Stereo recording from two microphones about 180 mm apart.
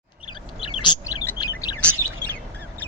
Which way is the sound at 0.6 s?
25° left (ahead or behind).